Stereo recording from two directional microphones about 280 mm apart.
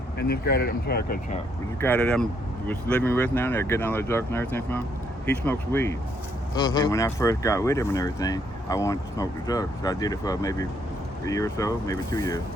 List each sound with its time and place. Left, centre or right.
0.2 s speech: left
1.8 s speech: centre